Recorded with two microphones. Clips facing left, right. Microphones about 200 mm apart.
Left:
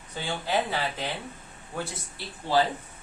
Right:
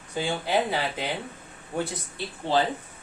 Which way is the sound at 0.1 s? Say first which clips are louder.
Right 3 dB; 15° right (ahead or behind).